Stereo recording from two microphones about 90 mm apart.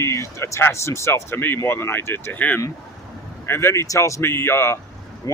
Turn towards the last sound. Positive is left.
turn(degrees=30)  # may be behind; listen again after turning